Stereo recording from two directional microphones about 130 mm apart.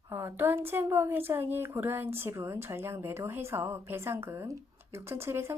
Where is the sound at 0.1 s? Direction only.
20° right (ahead or behind).